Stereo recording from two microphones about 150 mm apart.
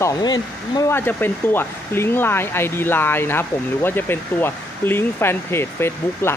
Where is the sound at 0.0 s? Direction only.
25° left (ahead or behind).